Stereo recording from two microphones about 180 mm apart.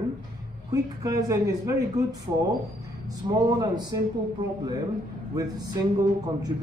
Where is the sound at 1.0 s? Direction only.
20° right (ahead or behind).